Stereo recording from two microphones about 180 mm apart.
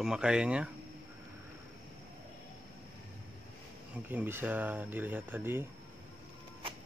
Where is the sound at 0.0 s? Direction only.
5° right (ahead or behind).